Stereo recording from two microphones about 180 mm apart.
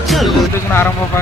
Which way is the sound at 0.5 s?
15° left (ahead or behind).